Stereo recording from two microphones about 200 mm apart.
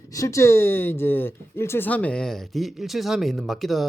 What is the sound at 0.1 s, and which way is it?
Speech, 15° left (ahead or behind).